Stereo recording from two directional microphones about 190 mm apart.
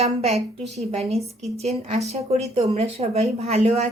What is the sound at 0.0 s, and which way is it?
A woman's voice, 35° right (ahead or behind).